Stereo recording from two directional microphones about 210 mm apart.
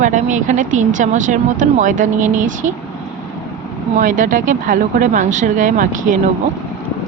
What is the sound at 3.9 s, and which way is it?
Speech, 40° right (ahead or behind).